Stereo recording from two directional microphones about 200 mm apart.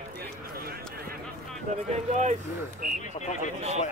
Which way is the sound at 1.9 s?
35° right (ahead or behind).